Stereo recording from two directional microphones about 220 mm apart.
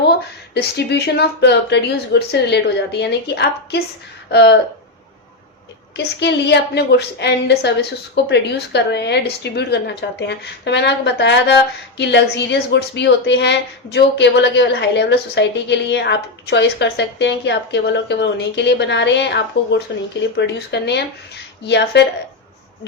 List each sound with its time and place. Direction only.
0.5 s a woman's voice: 50° left (ahead or behind)
6.0 s a woman's voice: 50° left (ahead or behind)